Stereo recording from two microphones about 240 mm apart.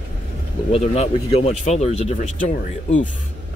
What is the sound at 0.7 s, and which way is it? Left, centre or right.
Speech, left.